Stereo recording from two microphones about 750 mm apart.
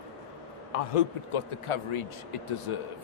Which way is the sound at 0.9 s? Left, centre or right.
Left.